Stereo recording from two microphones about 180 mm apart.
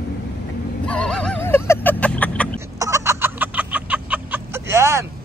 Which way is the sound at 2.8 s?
15° right (ahead or behind).